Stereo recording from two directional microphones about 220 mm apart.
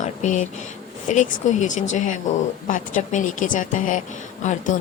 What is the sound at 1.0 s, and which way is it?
A woman's voice, 35° left (ahead or behind).